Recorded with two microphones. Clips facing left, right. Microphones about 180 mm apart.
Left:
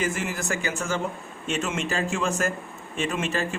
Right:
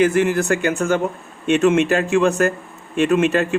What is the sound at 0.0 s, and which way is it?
A man's voice, 65° right (ahead or behind).